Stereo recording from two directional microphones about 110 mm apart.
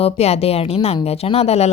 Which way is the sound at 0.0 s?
70° left (ahead or behind).